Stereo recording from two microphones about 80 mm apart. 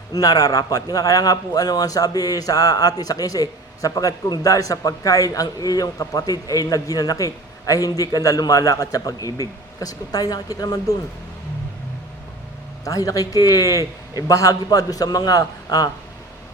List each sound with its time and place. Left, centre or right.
0.1 s a man's voice: left
12.8 s a man's voice: left